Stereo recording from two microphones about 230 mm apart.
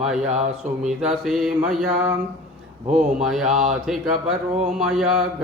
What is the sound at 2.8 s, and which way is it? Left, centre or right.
Speech, right.